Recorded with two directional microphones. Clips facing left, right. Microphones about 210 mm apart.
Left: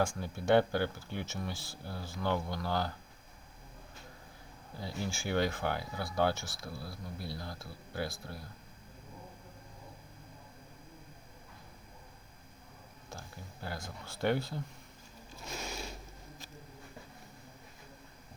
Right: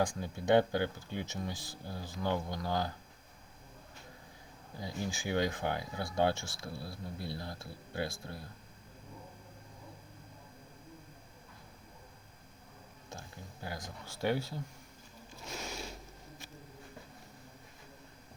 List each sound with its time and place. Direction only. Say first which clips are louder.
0.0 s speech: even; 20° right (ahead or behind)
4.8 s speech: even; 15° right (ahead or behind)
13.1 s speech: even; 20° right (ahead or behind)